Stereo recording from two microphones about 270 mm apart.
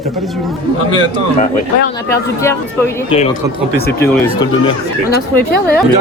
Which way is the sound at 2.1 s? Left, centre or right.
Centre.